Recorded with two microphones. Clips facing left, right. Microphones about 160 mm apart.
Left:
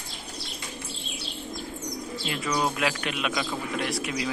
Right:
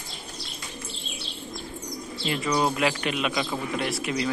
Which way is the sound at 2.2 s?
Centre (ahead or behind).